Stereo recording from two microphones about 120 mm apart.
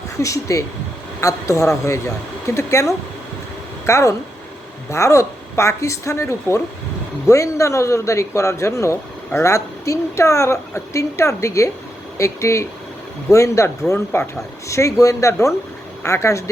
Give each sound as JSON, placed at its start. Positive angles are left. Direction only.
{"t": 0.2, "sound": "a man's voice", "side_deg": 25}